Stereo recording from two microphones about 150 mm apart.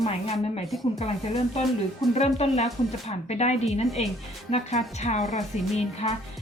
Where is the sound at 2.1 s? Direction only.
45° left (ahead or behind).